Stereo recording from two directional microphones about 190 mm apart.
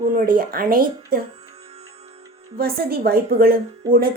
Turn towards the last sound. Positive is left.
turn(degrees=-50)  # may be behind; listen again after turning